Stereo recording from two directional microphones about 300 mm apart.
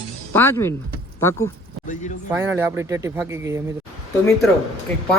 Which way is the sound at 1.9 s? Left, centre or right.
Left.